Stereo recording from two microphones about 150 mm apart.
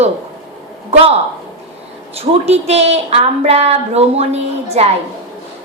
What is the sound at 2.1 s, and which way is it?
A woman's voice, 45° right (ahead or behind).